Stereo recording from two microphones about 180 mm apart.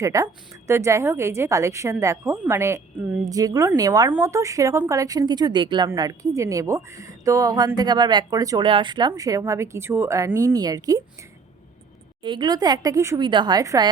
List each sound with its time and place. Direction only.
0.0 s a woman's voice: 15° right (ahead or behind)